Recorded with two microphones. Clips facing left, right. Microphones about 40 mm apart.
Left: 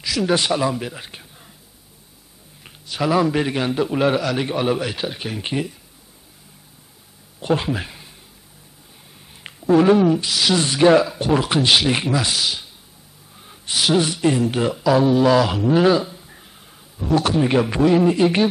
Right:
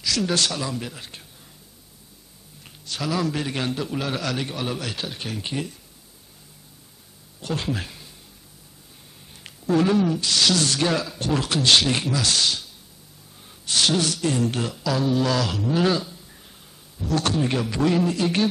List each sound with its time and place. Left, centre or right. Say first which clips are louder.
0.0 s speech: left 4 dB; centre
2.6 s a man's voice: left 7 dB; left
4.2 s speech: left 5 dB; centre
4.5 s speech: left 8 dB; left
7.3 s speech: left 7 dB; left
9.3 s speech: left 6 dB; centre
13.4 s a sound: left 1 dB; centre
14.0 s speech: left 4 dB; left
16.1 s a sound: left 4 dB; left
17.1 s speech: left 6 dB; centre